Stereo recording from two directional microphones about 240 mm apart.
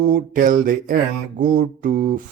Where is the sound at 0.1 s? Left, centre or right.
Right.